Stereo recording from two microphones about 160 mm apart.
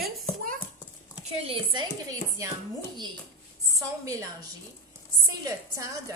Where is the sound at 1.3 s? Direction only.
35° right (ahead or behind).